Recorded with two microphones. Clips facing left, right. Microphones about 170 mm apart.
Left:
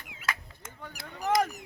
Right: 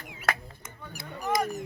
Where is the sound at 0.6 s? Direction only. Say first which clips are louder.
Even; 90° left.